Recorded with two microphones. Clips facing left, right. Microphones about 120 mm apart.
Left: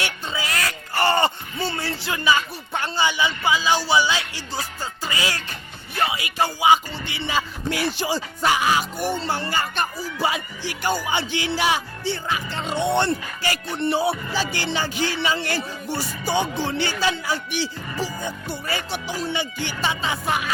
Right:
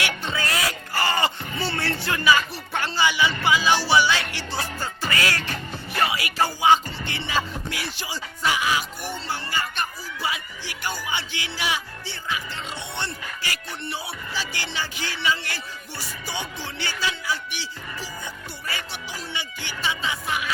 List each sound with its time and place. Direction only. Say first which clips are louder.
0.3 s music: right 1 dB; 5° left (ahead or behind)
0.5 s music: even; 5° right (ahead or behind)
0.9 s a sound: left 5 dB; 30° left (ahead or behind)
1.7 s music: right 1 dB; 15° left (ahead or behind)
7.3 s speech: left 3 dB; 35° left (ahead or behind)
13.4 s speech: left 8 dB; 35° left (ahead or behind)
18.7 s speech: left 6 dB; 30° left (ahead or behind)